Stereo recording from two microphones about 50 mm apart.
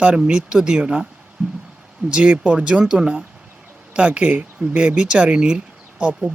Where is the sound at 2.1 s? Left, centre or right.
Right.